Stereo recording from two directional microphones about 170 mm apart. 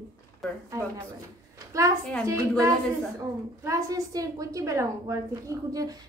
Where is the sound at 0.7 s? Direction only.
15° right (ahead or behind).